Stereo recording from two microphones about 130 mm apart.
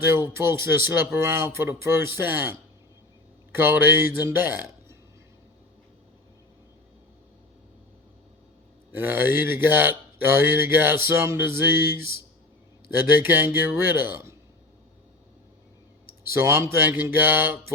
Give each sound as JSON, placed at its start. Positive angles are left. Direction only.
{"t": 0.0, "sound": "mantra", "side_deg": -20}
{"t": 8.9, "sound": "mantra", "side_deg": -15}
{"t": 13.0, "sound": "mantra", "side_deg": -15}
{"t": 16.3, "sound": "mantra", "side_deg": -20}